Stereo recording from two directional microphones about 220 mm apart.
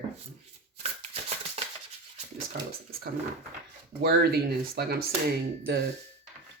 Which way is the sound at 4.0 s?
45° right (ahead or behind).